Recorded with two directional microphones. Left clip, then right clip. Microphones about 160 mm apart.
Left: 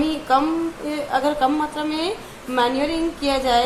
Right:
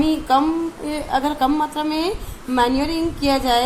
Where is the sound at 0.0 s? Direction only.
45° right (ahead or behind).